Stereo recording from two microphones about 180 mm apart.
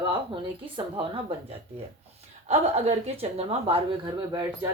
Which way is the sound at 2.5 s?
35° right (ahead or behind).